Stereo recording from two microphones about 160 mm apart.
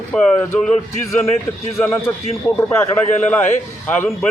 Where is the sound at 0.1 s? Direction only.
5° left (ahead or behind).